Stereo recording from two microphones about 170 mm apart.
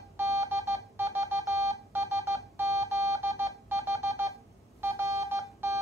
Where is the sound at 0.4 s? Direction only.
15° right (ahead or behind).